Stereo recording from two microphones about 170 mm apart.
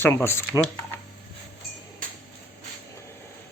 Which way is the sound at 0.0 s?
15° left (ahead or behind).